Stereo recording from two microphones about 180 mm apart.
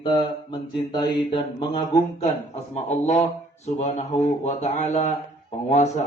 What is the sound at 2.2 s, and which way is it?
Speech, 40° left (ahead or behind).